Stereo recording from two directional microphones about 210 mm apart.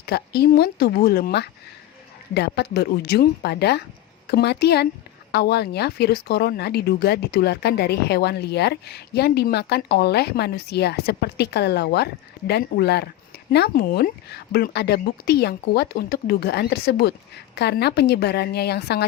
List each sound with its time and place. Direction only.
0.0 s speech: 50° left (ahead or behind)